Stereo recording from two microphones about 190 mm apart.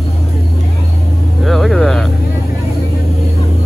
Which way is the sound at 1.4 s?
Centre (ahead or behind).